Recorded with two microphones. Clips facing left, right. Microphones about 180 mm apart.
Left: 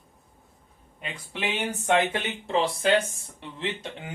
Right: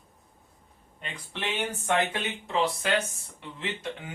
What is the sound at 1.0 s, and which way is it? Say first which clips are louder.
Speech: left 3 dB; 10° left (ahead or behind).